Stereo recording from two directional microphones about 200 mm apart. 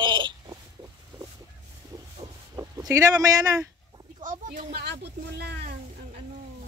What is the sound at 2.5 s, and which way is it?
Speech, 15° right (ahead or behind).